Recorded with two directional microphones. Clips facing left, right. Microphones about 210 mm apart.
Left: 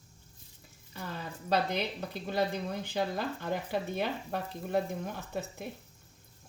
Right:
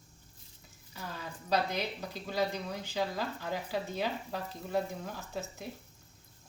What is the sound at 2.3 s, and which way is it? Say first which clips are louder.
Speech: left 2 dB; 55° left (ahead or behind).